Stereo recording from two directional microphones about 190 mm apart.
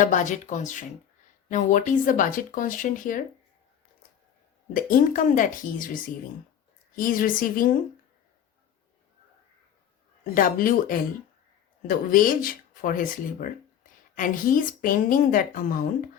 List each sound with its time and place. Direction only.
0.0 s speech: 40° left (ahead or behind)
4.7 s speech: 45° left (ahead or behind)
10.3 s speech: 45° left (ahead or behind)